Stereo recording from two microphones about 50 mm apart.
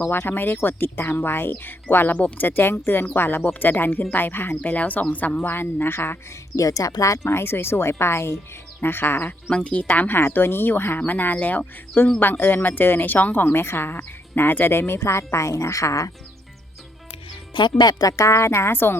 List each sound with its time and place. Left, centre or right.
0.1 s speech: left
4.7 s speech: left
6.6 s speech: left
7.3 s speech: left
8.8 s speech: left
9.5 s speech: left
9.9 s speech: left
12.2 s speech: left
18.2 s a woman's voice: left
18.7 s speech: left